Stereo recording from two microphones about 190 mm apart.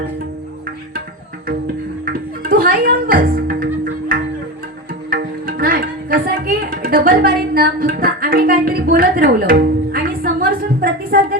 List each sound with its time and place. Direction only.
2.1 s music: 50° right (ahead or behind)
5.1 s music: 50° right (ahead or behind)